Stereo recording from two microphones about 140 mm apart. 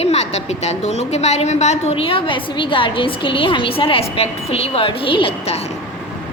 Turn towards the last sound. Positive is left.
turn(degrees=45)  # may be behind; listen again after turning